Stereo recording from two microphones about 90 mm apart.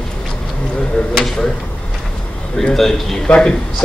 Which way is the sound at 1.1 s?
5° left (ahead or behind).